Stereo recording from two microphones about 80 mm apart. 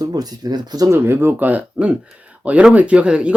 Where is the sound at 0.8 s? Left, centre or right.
Right; by 3.3 s centre.